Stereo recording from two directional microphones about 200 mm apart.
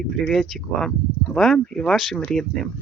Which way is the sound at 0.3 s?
Centre (ahead or behind).